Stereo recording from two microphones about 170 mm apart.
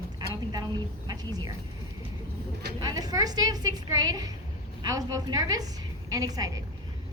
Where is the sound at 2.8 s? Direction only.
20° right (ahead or behind).